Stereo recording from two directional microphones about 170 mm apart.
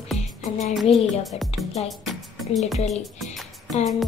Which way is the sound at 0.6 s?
Centre (ahead or behind).